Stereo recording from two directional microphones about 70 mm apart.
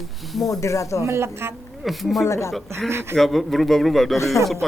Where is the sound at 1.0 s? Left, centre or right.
Right.